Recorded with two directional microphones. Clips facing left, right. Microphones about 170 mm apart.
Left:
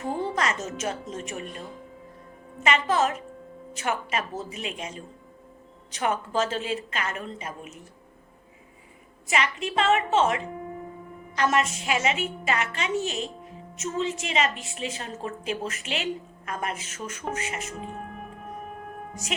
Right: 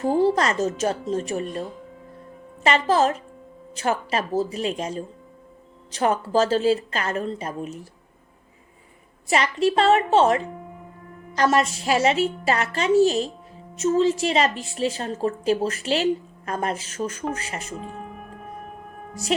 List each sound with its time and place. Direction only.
0.0 s a woman's voice: 35° right (ahead or behind)
2.6 s a woman's voice: 35° right (ahead or behind)
9.2 s a woman's voice: 35° right (ahead or behind)
19.2 s a woman's voice: 35° right (ahead or behind)